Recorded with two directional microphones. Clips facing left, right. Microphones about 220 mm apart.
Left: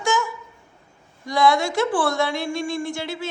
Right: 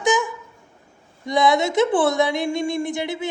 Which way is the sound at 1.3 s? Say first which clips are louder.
Right 1 dB; 20° right (ahead or behind).